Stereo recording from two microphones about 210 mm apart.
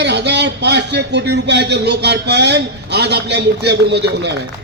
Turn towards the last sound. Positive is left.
turn(degrees=-55)  # may be behind; listen again after turning